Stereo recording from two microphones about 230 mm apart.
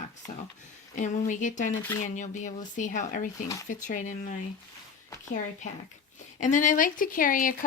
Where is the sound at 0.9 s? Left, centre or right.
Left.